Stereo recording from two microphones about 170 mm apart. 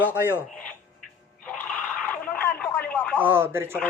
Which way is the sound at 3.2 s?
15° right (ahead or behind).